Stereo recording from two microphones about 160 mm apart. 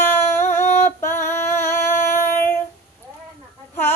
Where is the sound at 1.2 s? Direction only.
15° left (ahead or behind).